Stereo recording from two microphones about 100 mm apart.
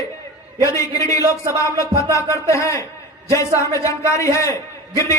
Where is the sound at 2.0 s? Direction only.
30° left (ahead or behind).